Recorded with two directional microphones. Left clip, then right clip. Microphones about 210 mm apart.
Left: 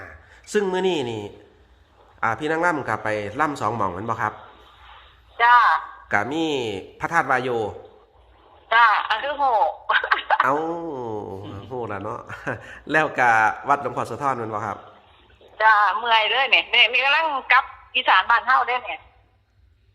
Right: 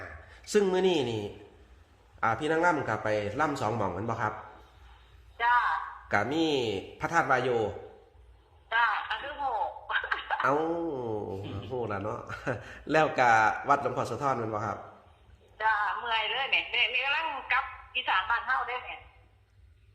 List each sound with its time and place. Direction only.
0.5 s a man's voice: 15° left (ahead or behind)
4.8 s a sound: 50° left (ahead or behind)
6.1 s a man's voice: 15° left (ahead or behind)
8.7 s a sound: 50° left (ahead or behind)
10.4 s a man's voice: 15° left (ahead or behind)
15.5 s a woman's voice: 50° left (ahead or behind)